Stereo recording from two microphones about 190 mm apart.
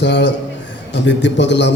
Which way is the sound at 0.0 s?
75° left (ahead or behind).